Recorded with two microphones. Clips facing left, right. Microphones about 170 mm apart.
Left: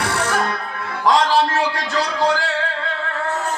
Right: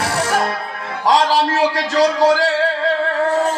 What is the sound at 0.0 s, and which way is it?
Music, 40° right (ahead or behind).